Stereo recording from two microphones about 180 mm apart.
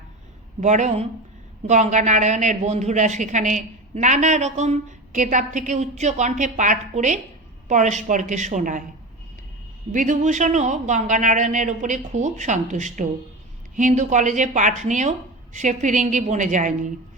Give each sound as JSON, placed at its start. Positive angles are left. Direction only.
{"t": 0.6, "sound": "a man's voice", "side_deg": -40}
{"t": 9.9, "sound": "speech", "side_deg": -45}